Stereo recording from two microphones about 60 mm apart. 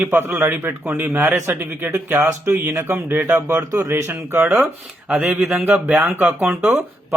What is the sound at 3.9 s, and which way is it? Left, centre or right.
Speech, right.